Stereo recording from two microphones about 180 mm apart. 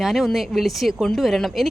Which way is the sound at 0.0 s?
Centre (ahead or behind).